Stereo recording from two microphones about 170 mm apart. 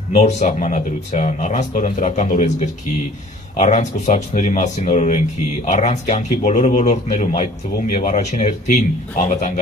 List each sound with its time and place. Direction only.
0.1 s speech: 40° left (ahead or behind)